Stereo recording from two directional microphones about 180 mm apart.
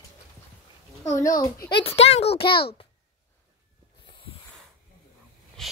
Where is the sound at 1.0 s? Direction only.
15° left (ahead or behind).